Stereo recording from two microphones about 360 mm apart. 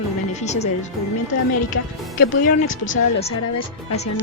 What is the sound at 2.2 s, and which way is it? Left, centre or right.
Speech, left.